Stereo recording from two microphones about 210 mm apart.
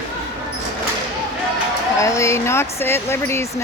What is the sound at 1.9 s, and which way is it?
Speech, 15° left (ahead or behind).